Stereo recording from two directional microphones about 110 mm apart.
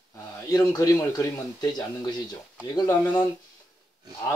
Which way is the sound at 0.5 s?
35° left (ahead or behind).